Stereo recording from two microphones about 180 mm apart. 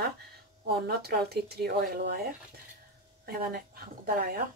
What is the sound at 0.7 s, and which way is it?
A woman's voice, 60° right (ahead or behind).